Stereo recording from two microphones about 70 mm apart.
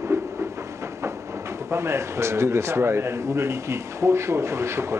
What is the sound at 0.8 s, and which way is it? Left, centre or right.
Speech, right.